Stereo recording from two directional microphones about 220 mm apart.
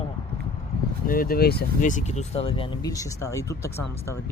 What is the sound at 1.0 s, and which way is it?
Speech, 40° left (ahead or behind).